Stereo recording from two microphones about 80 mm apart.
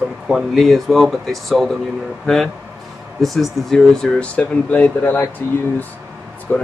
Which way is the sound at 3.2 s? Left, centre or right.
Centre.